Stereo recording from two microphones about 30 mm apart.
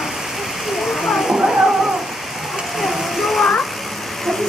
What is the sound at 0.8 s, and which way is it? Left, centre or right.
Splash, centre.